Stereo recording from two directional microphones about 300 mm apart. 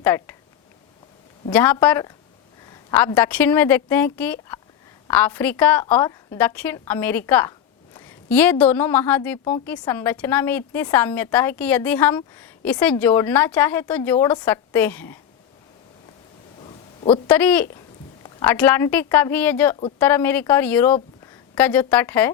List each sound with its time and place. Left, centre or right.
0.0 s speech: centre
1.5 s a woman's voice: centre
17.2 s a woman's voice: centre
18.2 s a sound: centre
18.5 s a woman's voice: centre